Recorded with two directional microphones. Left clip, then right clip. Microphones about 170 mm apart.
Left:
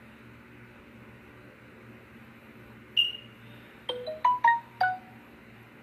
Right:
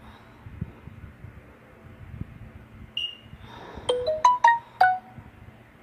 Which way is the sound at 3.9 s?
35° right (ahead or behind).